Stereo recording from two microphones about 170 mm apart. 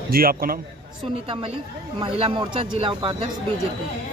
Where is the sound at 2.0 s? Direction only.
30° right (ahead or behind).